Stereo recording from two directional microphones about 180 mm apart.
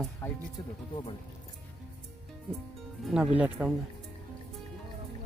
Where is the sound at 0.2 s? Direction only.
15° left (ahead or behind).